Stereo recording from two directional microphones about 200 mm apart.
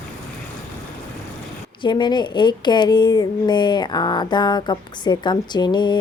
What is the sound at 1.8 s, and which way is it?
A woman's voice, 20° left (ahead or behind).